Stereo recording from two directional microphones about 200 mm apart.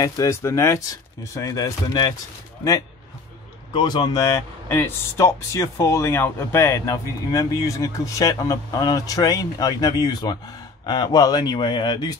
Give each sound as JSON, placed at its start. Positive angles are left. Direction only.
{"t": 0.0, "sound": "speech", "side_deg": 15}
{"t": 3.7, "sound": "speech", "side_deg": 20}